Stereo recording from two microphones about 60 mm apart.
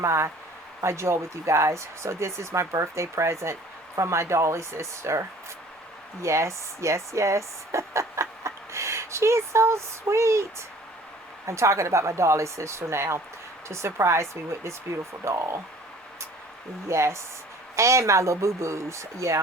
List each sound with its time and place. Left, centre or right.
0.0 s speech: right
6.2 s speech: right
11.4 s speech: right
16.9 s speech: right